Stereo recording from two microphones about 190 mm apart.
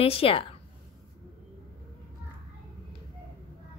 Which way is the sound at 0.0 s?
30° left (ahead or behind).